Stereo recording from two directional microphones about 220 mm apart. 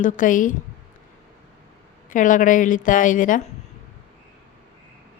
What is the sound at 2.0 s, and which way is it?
A woman's voice, 35° left (ahead or behind).